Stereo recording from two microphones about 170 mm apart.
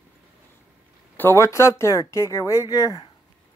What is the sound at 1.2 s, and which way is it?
Speech, 15° left (ahead or behind).